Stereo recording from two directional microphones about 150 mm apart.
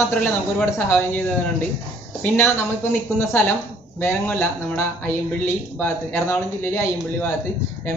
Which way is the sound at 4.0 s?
15° left (ahead or behind).